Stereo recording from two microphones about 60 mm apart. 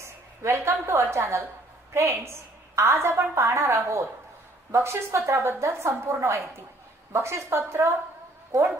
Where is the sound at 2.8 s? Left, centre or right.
Right.